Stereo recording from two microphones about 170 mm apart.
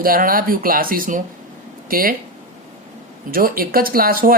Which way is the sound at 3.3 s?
60° right (ahead or behind).